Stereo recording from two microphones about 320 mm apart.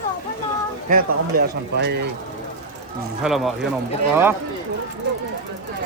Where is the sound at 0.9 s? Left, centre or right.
Right.